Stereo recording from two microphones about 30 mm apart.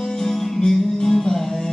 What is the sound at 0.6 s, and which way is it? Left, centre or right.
Music, centre.